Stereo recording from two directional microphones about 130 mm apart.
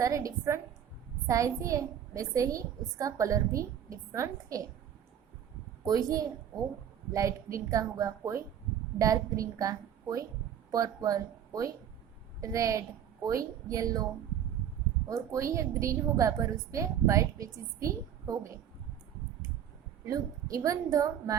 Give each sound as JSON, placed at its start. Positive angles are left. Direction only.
{"t": 0.0, "sound": "a woman's voice", "side_deg": -25}
{"t": 5.8, "sound": "a woman's voice", "side_deg": -30}
{"t": 15.0, "sound": "a woman's voice", "side_deg": -25}
{"t": 20.1, "sound": "a woman's voice", "side_deg": -25}